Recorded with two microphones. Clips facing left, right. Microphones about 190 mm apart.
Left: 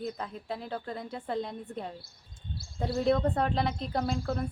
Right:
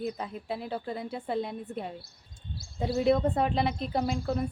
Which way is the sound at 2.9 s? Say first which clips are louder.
Right 2 dB; 10° right (ahead or behind).